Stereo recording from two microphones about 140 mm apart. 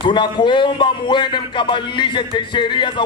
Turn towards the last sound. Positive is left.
turn(degrees=35)  # may be behind; listen again after turning